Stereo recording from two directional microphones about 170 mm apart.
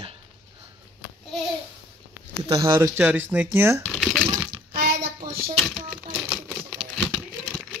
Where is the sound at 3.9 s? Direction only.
5° left (ahead or behind).